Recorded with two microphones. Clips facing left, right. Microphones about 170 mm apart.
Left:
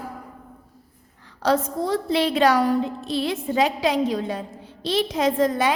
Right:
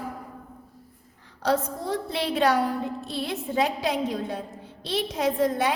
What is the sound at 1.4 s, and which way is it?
A woman's voice, 90° left.